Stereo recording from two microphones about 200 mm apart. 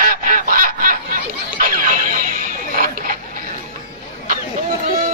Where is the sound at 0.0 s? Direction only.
45° right (ahead or behind).